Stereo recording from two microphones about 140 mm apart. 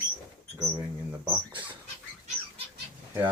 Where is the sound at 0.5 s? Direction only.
20° right (ahead or behind).